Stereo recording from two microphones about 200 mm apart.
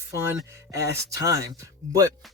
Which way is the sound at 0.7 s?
15° right (ahead or behind).